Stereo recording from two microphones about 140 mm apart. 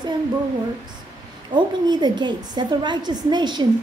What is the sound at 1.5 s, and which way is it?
A woman's voice, 30° right (ahead or behind).